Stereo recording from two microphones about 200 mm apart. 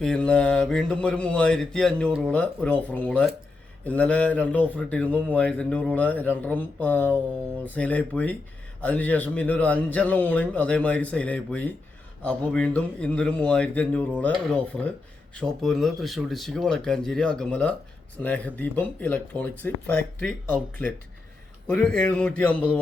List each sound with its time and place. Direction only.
0.0 s speech: 5° left (ahead or behind)